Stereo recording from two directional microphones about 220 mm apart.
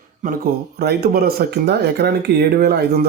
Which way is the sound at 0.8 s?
45° right (ahead or behind).